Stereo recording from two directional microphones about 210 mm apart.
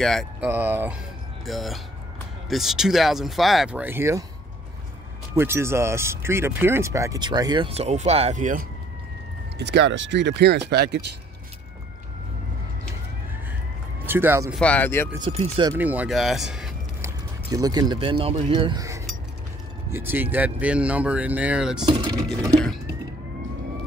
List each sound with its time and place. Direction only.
0.0 s speech: centre (ahead or behind)
0.5 s speech: 10° right (ahead or behind)
5.3 s speech: 10° right (ahead or behind); by 8.6 s 35° right (ahead or behind)
9.6 s speech: 55° right (ahead or behind)
14.0 s speech: 10° right (ahead or behind)
14.6 s speech: 5° left (ahead or behind)
15.3 s speech: 25° right (ahead or behind)
15.8 s speech: 5° right (ahead or behind)
17.0 s a sound: 15° right (ahead or behind)
17.9 s speech: 25° right (ahead or behind); by 21.8 s 5° right (ahead or behind)
21.8 s speech: 20° right (ahead or behind)